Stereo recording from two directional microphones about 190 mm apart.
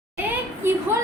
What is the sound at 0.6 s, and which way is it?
Speech, 10° right (ahead or behind).